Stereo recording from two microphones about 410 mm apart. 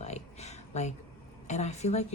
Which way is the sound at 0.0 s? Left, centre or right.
Centre.